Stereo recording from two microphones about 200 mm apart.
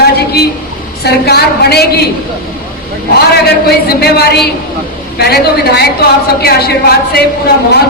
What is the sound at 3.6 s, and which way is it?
A woman's voice, 55° left (ahead or behind).